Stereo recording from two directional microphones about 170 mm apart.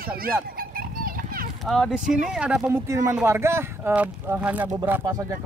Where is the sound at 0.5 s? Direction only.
60° right (ahead or behind).